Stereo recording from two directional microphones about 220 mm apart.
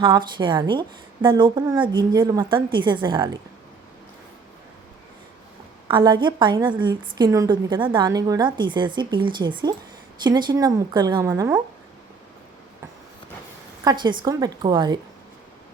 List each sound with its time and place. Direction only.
0.0 s a woman's voice: 20° right (ahead or behind)
5.9 s a woman's voice: 20° right (ahead or behind)
13.8 s a woman's voice: 20° right (ahead or behind)